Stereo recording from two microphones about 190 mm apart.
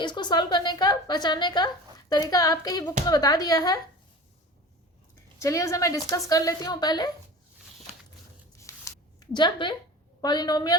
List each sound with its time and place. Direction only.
0.0 s a woman's voice: 25° left (ahead or behind)
5.4 s a woman's voice: 15° left (ahead or behind)
8.5 s a sound: 15° left (ahead or behind)
10.2 s a woman's voice: 20° left (ahead or behind)